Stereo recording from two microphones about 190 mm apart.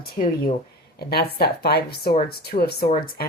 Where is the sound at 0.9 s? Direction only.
55° left (ahead or behind).